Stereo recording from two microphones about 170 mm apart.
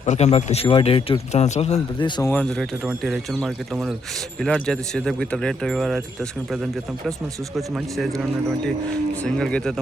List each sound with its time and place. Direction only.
0.0 s speech: 40° left (ahead or behind)
2.0 s speech: 25° left (ahead or behind)
2.2 s speech: 5° left (ahead or behind)
9.2 s speech: 5° left (ahead or behind)